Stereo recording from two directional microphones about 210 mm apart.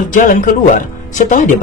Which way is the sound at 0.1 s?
40° left (ahead or behind).